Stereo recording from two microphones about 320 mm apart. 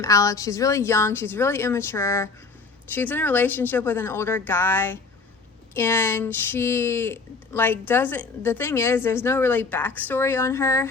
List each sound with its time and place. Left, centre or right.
0.0 s speech: centre